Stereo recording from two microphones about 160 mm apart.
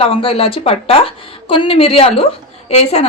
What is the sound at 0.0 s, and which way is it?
A woman's voice, 35° left (ahead or behind).